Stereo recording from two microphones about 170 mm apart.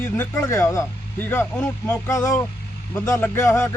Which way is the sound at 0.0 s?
15° left (ahead or behind).